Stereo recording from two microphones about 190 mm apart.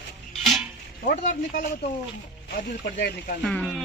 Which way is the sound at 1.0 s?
50° left (ahead or behind).